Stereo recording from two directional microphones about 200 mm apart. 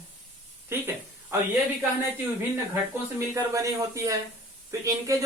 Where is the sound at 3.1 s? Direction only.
15° right (ahead or behind).